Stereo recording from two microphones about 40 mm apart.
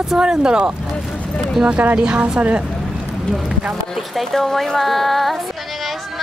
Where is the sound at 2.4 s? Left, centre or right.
Right.